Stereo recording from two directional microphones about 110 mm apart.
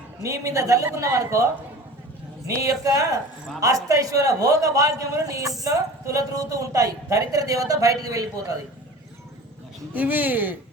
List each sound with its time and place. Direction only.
0.2 s a man's voice: 30° right (ahead or behind)
2.5 s a man's voice: 30° right (ahead or behind)
9.9 s speech: 15° right (ahead or behind)